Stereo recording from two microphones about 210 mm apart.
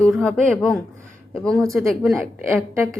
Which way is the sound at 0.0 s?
5° left (ahead or behind).